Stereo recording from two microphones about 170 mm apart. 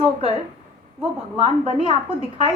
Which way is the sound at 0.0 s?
35° right (ahead or behind).